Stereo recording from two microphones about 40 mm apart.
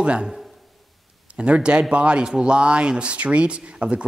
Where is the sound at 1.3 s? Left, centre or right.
Right.